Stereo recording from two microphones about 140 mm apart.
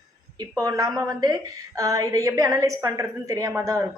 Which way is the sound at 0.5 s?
25° right (ahead or behind).